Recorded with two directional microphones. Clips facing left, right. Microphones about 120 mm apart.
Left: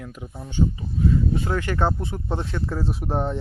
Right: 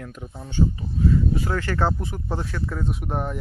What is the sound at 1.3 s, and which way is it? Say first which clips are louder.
Speech: left 1 dB; 20° left (ahead or behind).